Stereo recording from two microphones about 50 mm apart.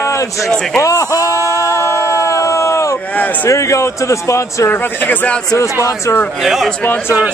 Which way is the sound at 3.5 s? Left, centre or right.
Left.